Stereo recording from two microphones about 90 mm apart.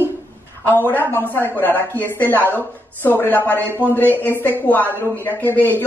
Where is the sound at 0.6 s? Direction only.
20° left (ahead or behind).